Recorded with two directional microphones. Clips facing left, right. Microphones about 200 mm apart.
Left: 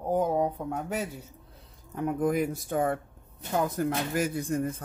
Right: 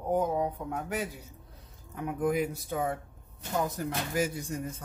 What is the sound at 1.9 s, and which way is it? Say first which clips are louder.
Speech: left 2 dB; 40° left (ahead or behind).